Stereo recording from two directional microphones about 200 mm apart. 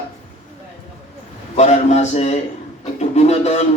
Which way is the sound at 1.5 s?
35° left (ahead or behind).